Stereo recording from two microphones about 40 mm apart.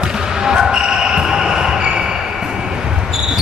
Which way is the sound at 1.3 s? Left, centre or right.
Centre.